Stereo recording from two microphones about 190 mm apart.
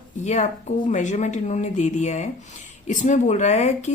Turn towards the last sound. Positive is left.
turn(degrees=35)  # may be behind; listen again after turning